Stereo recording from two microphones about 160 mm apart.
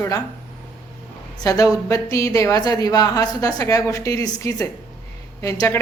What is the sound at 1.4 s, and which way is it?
A woman's voice, 20° left (ahead or behind).